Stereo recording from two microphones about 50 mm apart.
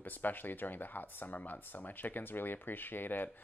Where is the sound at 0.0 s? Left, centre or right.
Left.